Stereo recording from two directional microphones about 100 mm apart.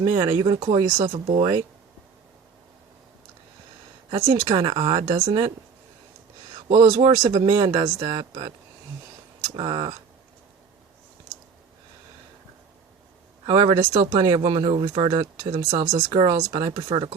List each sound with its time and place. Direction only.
0.0 s speech: 40° right (ahead or behind)
0.4 s speech: 60° right (ahead or behind)
4.1 s speech: 45° right (ahead or behind)
6.5 s speech: 50° right (ahead or behind)
9.6 s speech: 55° right (ahead or behind)
13.4 s speech: 50° right (ahead or behind)
15.7 s speech: 40° right (ahead or behind)
16.1 s speech: 55° right (ahead or behind)
16.4 s speech: 45° right (ahead or behind)
16.9 s speech: 65° right (ahead or behind)